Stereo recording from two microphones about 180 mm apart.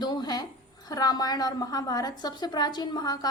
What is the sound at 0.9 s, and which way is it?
A woman's voice, 20° left (ahead or behind).